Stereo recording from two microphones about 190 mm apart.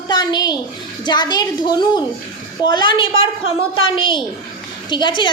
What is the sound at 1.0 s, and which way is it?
A woman's voice, 20° left (ahead or behind).